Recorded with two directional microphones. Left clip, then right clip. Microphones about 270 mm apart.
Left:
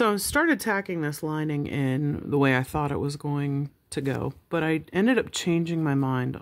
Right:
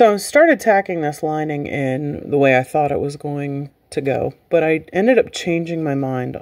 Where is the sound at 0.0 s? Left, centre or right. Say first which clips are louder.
Right 11 dB; centre.